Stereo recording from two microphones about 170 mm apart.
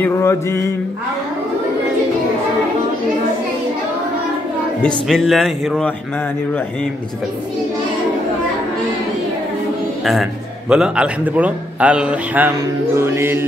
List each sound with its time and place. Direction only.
0.0 s mantra: 15° left (ahead or behind)
4.8 s speech: centre (ahead or behind)
10.7 s a man's voice: 5° right (ahead or behind)